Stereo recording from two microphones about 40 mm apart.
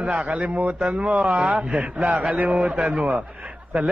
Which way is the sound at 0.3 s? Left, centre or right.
Right.